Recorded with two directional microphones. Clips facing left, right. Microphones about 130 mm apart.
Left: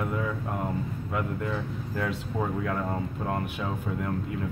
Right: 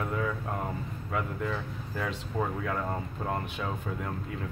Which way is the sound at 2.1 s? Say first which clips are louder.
Left 2 dB; 5° left (ahead or behind).